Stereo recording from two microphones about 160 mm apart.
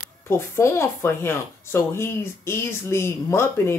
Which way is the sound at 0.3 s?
15° left (ahead or behind).